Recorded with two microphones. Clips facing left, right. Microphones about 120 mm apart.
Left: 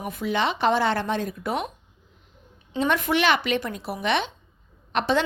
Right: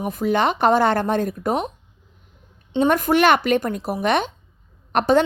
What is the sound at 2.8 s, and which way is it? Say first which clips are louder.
A woman's voice: right 6 dB; 45° right (ahead or behind).